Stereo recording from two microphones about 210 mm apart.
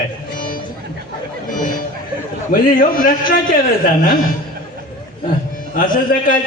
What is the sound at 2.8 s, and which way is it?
A man's voice, 40° left (ahead or behind).